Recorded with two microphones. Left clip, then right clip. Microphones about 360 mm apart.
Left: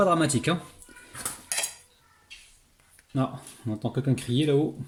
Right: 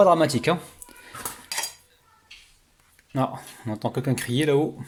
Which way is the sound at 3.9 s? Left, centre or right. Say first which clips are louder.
Even; centre.